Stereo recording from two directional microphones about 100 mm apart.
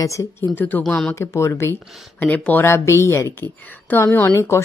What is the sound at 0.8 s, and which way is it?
Speech, 5° left (ahead or behind).